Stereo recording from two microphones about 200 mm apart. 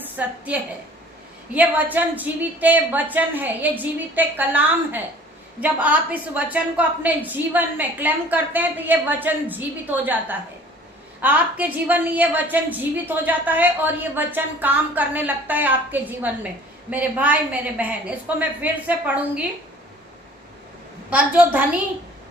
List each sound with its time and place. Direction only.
0.0 s a woman's voice: 10° right (ahead or behind)
21.1 s a woman's voice: 5° right (ahead or behind)